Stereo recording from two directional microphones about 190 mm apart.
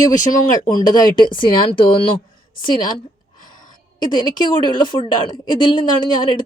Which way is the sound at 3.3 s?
45° left (ahead or behind).